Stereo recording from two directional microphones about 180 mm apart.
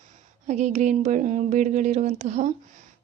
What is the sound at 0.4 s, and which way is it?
A woman's voice, 40° right (ahead or behind).